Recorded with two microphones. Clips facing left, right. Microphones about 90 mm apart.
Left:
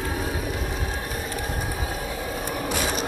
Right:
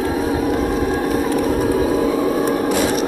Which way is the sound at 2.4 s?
45° right (ahead or behind).